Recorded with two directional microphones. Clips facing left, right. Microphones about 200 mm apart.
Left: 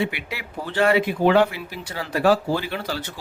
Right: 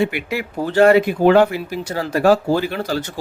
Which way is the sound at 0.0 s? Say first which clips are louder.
Right 7 dB; 45° right (ahead or behind).